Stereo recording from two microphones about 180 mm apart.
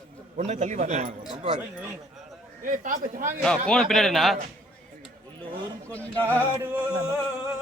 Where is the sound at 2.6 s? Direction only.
45° right (ahead or behind).